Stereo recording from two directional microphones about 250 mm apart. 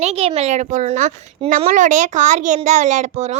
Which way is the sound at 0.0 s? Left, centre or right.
Right.